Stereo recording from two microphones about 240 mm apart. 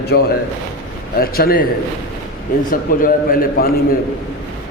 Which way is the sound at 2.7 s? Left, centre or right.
Left.